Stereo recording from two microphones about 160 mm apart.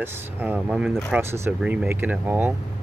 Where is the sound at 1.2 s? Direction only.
15° right (ahead or behind).